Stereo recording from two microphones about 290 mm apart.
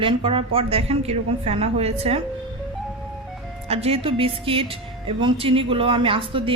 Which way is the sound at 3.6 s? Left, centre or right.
Right.